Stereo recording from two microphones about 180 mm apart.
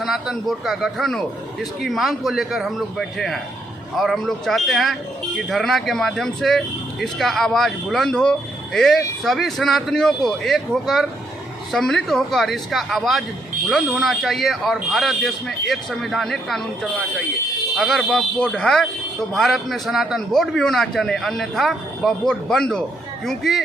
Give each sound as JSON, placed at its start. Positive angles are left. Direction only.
{"t": 0.0, "sound": "speech", "side_deg": 0}